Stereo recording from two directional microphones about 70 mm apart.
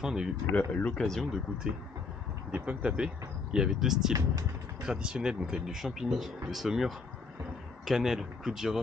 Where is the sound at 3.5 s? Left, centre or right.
Centre.